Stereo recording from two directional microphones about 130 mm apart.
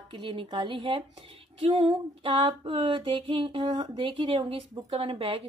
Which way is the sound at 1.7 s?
40° right (ahead or behind).